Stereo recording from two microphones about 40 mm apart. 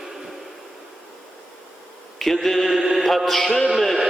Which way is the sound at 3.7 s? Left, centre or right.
Centre.